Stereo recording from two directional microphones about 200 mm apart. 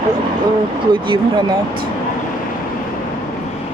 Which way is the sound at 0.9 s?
25° right (ahead or behind).